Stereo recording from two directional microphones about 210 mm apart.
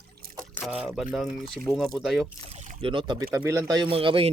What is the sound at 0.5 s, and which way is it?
Speech, 5° right (ahead or behind).